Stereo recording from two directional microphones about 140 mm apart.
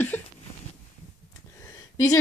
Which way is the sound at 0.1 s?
15° left (ahead or behind).